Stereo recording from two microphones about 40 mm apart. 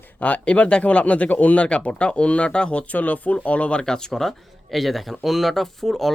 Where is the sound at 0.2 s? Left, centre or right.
Left.